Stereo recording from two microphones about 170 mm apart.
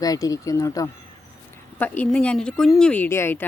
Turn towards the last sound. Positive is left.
turn(degrees=15)  # may be behind; listen again after turning